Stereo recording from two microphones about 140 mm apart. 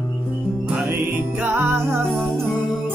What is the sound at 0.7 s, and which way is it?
Music, 10° right (ahead or behind).